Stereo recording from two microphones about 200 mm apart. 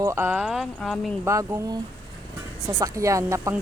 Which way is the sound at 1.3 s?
15° right (ahead or behind).